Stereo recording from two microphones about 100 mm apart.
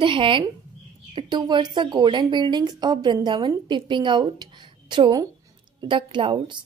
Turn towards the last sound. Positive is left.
turn(degrees=-55)  # may be behind; listen again after turning